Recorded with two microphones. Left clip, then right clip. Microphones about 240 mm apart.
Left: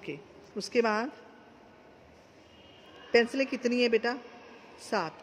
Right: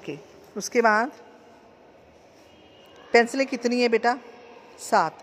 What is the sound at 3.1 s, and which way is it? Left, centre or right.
Speech, centre.